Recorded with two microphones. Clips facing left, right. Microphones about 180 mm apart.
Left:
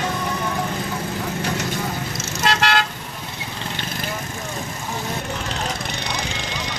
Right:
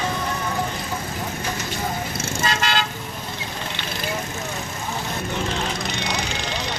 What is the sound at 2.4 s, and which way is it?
Car, 65° left (ahead or behind).